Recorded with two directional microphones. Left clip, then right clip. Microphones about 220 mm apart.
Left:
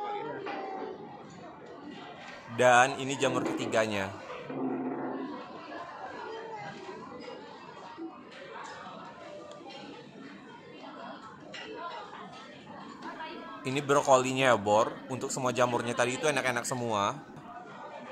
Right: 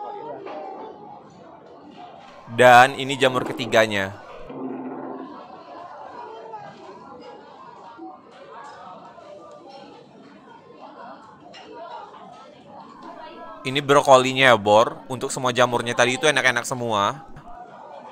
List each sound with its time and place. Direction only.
2.5 s speech: 15° right (ahead or behind)
13.7 s speech: 5° right (ahead or behind)